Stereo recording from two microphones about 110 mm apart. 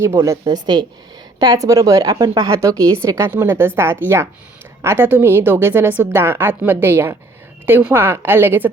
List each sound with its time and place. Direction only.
0.0 s a woman's voice: 25° right (ahead or behind)
1.4 s a woman's voice: 35° right (ahead or behind)